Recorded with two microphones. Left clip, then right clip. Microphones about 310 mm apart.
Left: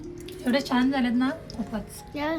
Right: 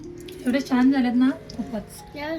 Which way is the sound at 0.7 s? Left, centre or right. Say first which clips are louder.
Right 3 dB; left.